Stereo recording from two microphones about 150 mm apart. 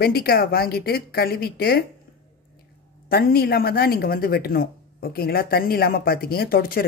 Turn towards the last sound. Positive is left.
turn(degrees=80)